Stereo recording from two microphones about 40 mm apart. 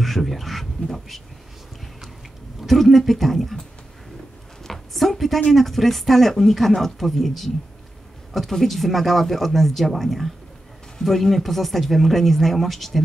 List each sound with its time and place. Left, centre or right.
0.0 s speech: centre
2.6 s speech: centre
4.6 s a sound: centre
5.5 s speech: centre